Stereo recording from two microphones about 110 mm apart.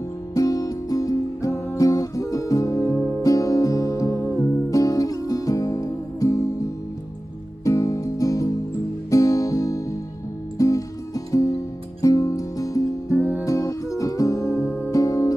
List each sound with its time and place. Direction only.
0.3 s music: 30° left (ahead or behind)
13.1 s music: 15° right (ahead or behind)
13.5 s music: 30° left (ahead or behind)